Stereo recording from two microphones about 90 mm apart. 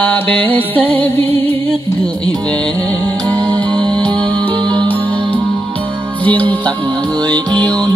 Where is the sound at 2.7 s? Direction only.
40° right (ahead or behind); by 3.9 s 55° right (ahead or behind).